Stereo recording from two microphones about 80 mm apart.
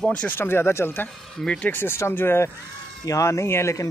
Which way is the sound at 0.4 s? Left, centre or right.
Left.